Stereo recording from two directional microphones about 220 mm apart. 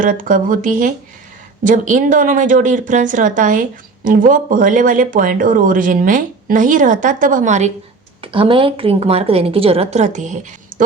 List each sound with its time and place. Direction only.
0.0 s a woman's voice: 35° right (ahead or behind)